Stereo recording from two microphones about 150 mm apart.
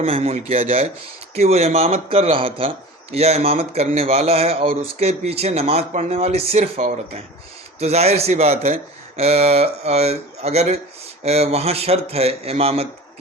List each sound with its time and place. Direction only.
0.0 s a man's voice: 40° right (ahead or behind)
7.8 s a man's voice: 45° right (ahead or behind)